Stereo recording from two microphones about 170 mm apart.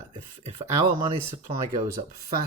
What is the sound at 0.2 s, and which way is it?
Speech, 15° right (ahead or behind).